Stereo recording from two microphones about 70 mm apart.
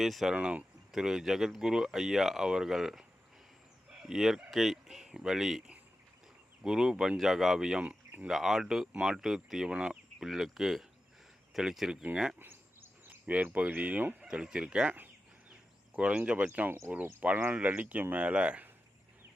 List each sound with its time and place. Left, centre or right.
0.0 s speech: centre
3.8 s fowl: centre
4.5 s speech: centre
12.4 s a sound: right
14.2 s speech: centre
14.9 s a sound: right
17.2 s speech: right